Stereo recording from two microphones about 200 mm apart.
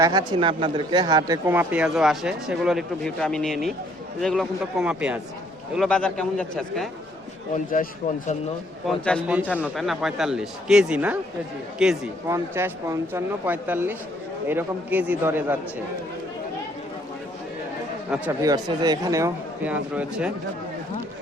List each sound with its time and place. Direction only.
0.0 s speech: 20° right (ahead or behind); by 6.8 s 5° left (ahead or behind)
7.5 s a man's voice: 40° left (ahead or behind)
8.9 s speech: 5° left (ahead or behind)
12.3 s speech: 15° right (ahead or behind)
18.1 s speech: 15° right (ahead or behind)